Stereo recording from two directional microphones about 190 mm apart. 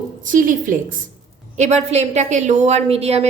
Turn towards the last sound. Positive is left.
turn(degrees=-30)  # may be behind; listen again after turning